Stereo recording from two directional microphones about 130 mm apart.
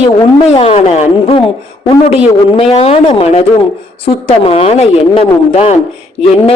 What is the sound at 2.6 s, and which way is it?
A woman's voice, 50° left (ahead or behind).